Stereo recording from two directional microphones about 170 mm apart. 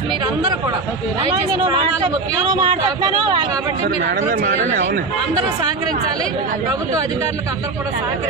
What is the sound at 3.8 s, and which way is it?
Speech, 55° right (ahead or behind).